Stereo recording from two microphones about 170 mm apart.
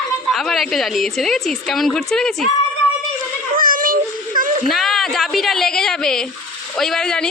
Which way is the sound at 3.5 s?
55° right (ahead or behind).